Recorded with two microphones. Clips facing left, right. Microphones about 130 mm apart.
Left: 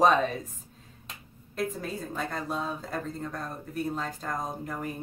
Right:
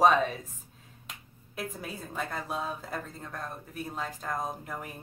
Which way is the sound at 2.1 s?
5° right (ahead or behind).